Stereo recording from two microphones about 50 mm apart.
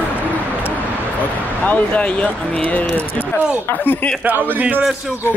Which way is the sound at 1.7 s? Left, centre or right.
Left.